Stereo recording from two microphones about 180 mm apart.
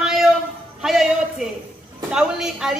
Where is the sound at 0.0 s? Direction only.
Centre (ahead or behind).